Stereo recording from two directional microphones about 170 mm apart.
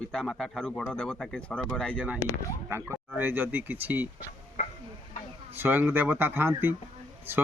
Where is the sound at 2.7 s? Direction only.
15° right (ahead or behind).